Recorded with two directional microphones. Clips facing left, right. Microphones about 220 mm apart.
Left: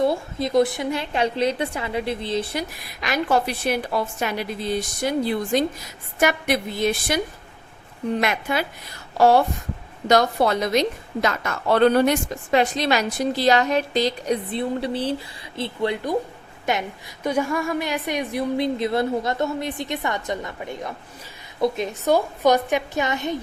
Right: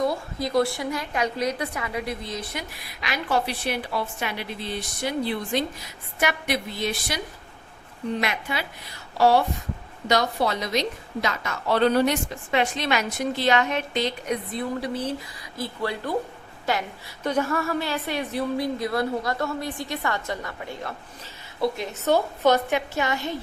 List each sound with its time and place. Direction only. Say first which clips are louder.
0.0 s a woman's voice: left 4 dB; 25° left (ahead or behind)
3.0 s a woman's voice: left 4 dB; 45° left (ahead or behind)
8.2 s a woman's voice: left 5 dB; 50° left (ahead or behind); by 16.1 s 20° left (ahead or behind)
17.2 s a woman's voice: left 2 dB; 10° left (ahead or behind)